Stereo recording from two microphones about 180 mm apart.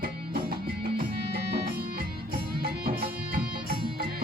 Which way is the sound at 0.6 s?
55° right (ahead or behind).